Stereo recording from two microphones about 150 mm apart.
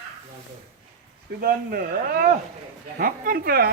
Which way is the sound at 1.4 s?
85° right.